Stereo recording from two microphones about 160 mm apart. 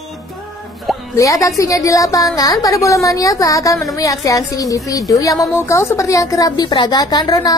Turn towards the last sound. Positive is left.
turn(degrees=25)  # may be behind; listen again after turning